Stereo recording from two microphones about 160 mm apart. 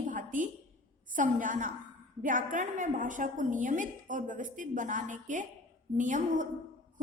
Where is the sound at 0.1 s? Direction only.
55° right (ahead or behind).